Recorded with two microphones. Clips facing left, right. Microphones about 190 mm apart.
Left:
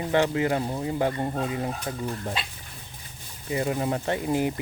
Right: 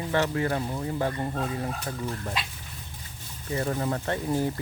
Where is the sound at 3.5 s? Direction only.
15° left (ahead or behind).